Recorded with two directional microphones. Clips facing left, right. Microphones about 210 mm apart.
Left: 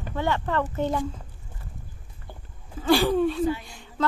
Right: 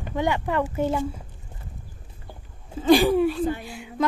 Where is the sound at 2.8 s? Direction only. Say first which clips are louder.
Right 3 dB; 15° right (ahead or behind).